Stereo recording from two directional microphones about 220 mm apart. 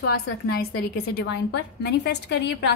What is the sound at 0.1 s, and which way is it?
A woman's voice, 45° left (ahead or behind).